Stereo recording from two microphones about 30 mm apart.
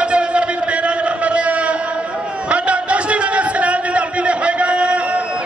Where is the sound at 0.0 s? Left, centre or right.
Right.